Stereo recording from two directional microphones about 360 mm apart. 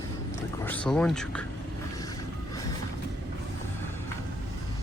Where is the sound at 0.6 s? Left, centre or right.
Centre.